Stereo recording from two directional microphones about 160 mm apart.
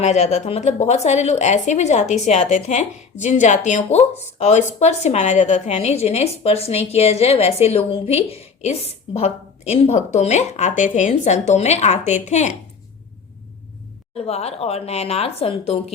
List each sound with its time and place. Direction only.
0.0 s speech: 45° left (ahead or behind)
14.2 s speech: 40° left (ahead or behind)